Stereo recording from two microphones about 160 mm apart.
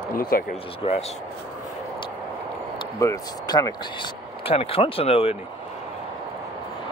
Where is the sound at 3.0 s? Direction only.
20° left (ahead or behind).